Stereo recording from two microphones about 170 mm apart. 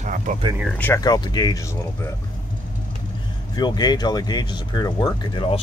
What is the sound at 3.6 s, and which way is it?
Speech, 25° left (ahead or behind).